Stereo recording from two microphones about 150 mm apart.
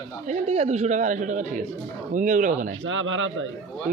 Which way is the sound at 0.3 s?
45° right (ahead or behind).